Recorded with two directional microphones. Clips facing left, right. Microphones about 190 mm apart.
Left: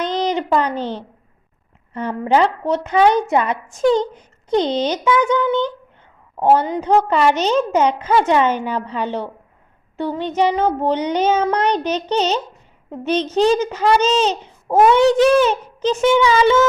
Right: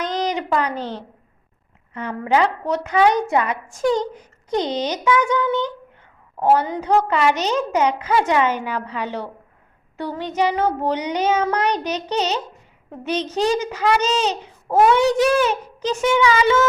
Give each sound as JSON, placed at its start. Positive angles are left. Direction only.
{"t": 0.0, "sound": "a woman's voice", "side_deg": 25}